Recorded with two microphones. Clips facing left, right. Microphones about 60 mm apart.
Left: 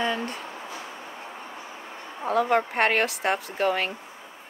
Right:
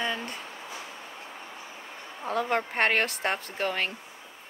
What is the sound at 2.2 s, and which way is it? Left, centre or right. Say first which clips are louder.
Speech: left 5 dB; centre.